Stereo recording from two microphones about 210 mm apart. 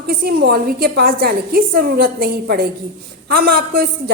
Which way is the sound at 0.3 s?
45° right (ahead or behind).